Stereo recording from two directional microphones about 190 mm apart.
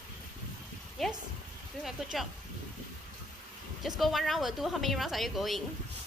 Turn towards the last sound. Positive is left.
turn(degrees=0)  # may be behind; listen again after turning